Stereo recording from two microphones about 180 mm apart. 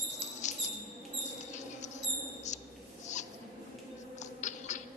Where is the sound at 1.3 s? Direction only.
40° left (ahead or behind).